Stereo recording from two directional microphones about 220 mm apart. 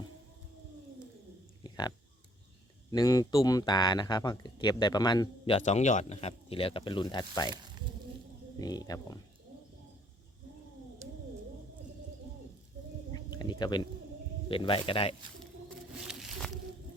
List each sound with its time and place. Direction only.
1.6 s oink: 20° left (ahead or behind)
2.9 s speech: 15° left (ahead or behind)
8.5 s speech: 15° left (ahead or behind)
13.1 s a sound: 20° left (ahead or behind)
14.5 s speech: 25° left (ahead or behind)
16.0 s a sound: centre (ahead or behind)